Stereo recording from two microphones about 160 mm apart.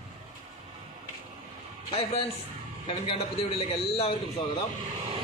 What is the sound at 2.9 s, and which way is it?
A man's voice, 35° left (ahead or behind).